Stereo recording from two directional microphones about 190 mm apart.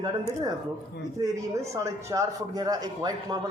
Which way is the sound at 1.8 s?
15° right (ahead or behind).